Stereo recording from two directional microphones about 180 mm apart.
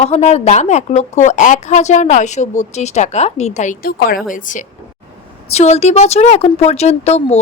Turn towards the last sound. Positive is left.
turn(degrees=35)  # may be behind; listen again after turning